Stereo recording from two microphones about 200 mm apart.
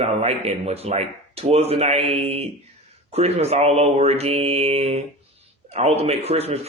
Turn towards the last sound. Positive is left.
turn(degrees=-30)  # may be behind; listen again after turning